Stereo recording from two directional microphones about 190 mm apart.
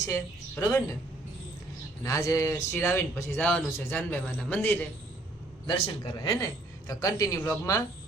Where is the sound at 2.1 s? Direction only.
15° left (ahead or behind).